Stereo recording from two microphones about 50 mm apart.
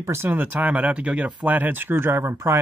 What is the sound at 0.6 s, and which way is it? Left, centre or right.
Speech, right.